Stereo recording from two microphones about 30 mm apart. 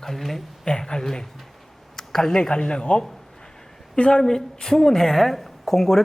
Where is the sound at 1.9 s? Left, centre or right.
Centre.